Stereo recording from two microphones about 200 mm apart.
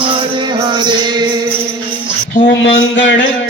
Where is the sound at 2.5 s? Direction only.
65° left (ahead or behind).